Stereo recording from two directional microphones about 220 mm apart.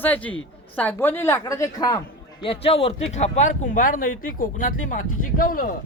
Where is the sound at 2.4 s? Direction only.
25° left (ahead or behind).